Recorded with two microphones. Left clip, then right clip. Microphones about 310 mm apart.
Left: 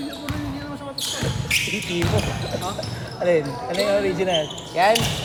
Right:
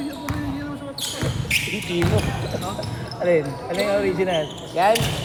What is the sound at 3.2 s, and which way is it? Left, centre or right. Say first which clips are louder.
Speech: even; left.